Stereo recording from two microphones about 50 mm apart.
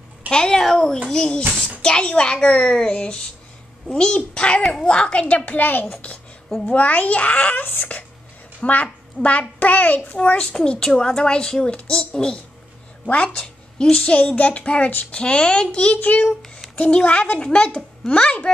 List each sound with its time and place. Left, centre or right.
0.3 s a child's voice: centre; by 10.1 s left
10.5 s a child's voice: centre; by 15.1 s left
15.1 s a child's voice: centre
16.0 s a child's voice: left; by 18.3 s centre